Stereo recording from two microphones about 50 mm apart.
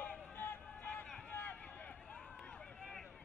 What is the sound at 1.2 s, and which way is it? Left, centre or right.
Run, left.